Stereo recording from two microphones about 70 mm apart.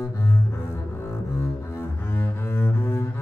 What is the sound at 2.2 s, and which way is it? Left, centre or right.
Cello, left.